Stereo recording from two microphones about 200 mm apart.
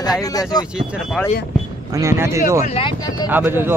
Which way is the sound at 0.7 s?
Centre (ahead or behind).